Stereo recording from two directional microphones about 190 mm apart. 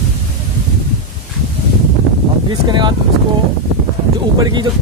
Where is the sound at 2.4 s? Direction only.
25° right (ahead or behind).